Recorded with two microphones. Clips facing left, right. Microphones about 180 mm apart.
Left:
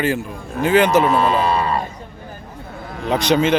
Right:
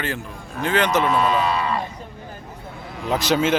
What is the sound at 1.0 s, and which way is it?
Speech, 35° left (ahead or behind).